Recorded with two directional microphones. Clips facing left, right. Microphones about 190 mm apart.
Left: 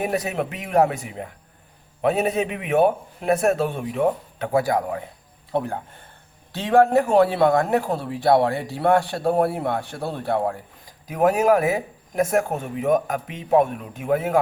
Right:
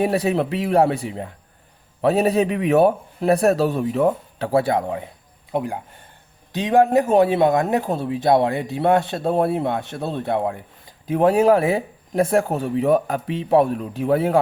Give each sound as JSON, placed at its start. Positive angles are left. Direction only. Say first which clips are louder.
{"t": 0.0, "sound": "speech", "louder": "right 5 dB", "side_deg": -30}
{"t": 5.5, "sound": "a man's voice", "louder": "right 1 dB", "side_deg": -15}